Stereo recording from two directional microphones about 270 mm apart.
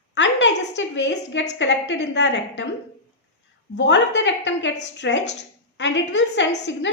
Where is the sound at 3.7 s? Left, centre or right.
Left.